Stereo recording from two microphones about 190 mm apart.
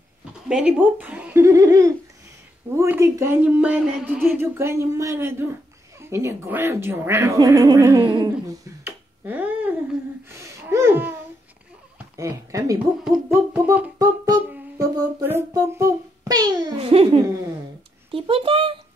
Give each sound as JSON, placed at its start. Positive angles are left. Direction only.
{"t": 0.5, "sound": "speech", "side_deg": -5}
{"t": 8.8, "sound": "finger snapping", "side_deg": -10}
{"t": 10.3, "sound": "a sound", "side_deg": -15}
{"t": 12.2, "sound": "speech", "side_deg": -15}
{"t": 14.8, "sound": "a sound", "side_deg": -20}
{"t": 16.7, "sound": "a child's voice", "side_deg": -30}